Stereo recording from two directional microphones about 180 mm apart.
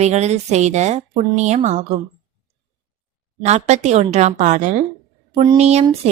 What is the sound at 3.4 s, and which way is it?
A woman's voice, 40° right (ahead or behind).